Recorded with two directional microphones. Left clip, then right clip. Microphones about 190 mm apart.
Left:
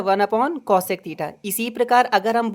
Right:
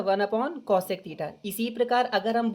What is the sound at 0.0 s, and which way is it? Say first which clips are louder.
Speech: left 7 dB; 35° left (ahead or behind).